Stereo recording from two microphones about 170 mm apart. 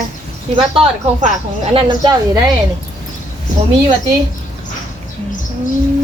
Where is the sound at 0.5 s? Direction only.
30° right (ahead or behind).